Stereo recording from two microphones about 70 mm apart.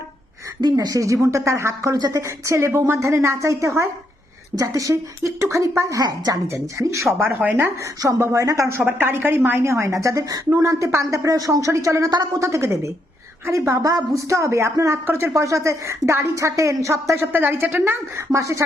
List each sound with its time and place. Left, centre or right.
0.6 s speech: right
0.9 s speech: right
1.9 s speech: right
2.5 s speech: right
7.3 s speech: right
8.2 s speech: right
9.0 s a woman's voice: right
11.1 s speech: right
15.0 s speech: right
15.4 s speech: right
17.2 s a woman's voice: right
18.3 s speech: right